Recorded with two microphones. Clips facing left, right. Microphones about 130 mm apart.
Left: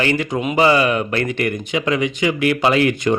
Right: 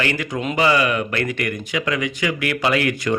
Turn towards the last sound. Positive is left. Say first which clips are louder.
# left 4 dB
turn(degrees=25)  # may be behind; listen again after turning